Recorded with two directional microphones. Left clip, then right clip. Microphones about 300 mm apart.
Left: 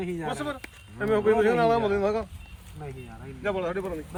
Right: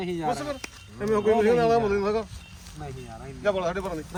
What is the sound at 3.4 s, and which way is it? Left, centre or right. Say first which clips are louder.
Speech: right 3 dB; centre.